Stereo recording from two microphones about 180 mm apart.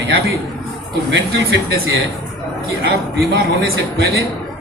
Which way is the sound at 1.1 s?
85° right.